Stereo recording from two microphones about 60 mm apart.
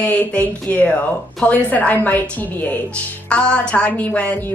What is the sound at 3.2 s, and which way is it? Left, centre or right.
A woman's voice, centre.